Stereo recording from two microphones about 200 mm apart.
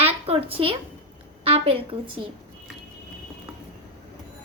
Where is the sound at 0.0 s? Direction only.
30° right (ahead or behind).